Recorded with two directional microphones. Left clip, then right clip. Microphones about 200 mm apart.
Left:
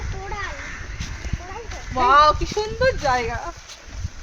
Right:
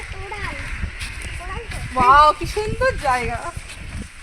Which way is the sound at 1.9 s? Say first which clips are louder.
Right 2 dB; 20° right (ahead or behind).